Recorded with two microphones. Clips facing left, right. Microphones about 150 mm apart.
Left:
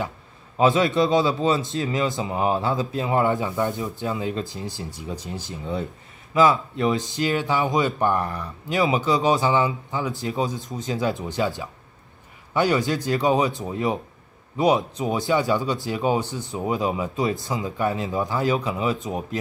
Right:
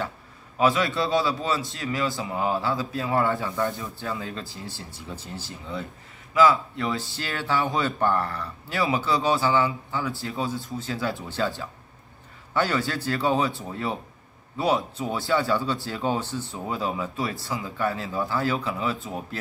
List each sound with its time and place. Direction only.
0.6 s a man's voice: 20° left (ahead or behind)